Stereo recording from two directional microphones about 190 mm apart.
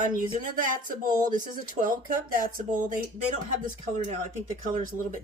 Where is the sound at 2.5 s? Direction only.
45° right (ahead or behind).